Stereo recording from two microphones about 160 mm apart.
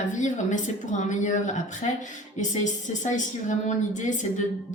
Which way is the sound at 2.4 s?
50° left (ahead or behind).